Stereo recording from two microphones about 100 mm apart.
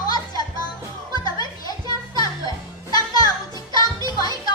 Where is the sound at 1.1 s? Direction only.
40° left (ahead or behind).